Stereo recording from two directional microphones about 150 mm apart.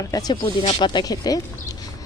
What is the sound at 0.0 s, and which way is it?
Speech, 25° left (ahead or behind).